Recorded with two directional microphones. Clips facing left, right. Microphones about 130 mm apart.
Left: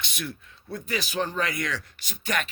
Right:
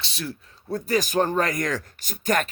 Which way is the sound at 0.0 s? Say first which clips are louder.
Right 2 dB; 30° right (ahead or behind).